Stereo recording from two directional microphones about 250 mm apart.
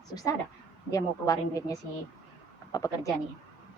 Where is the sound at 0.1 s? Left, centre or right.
Centre.